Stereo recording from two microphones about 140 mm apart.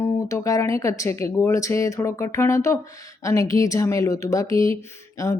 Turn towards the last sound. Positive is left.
turn(degrees=20)  # may be behind; listen again after turning